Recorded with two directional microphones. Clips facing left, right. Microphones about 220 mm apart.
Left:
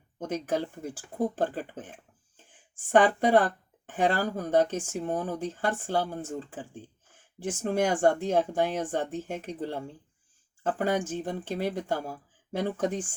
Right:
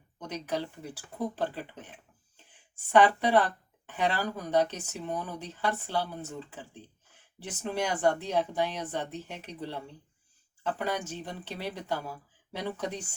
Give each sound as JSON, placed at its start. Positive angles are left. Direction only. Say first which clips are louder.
{"t": 0.2, "sound": "speech", "louder": "left 4 dB", "side_deg": 50}